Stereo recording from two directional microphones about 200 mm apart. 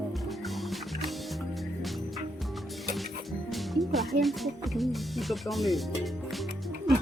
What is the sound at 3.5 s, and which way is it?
Speech, centre (ahead or behind).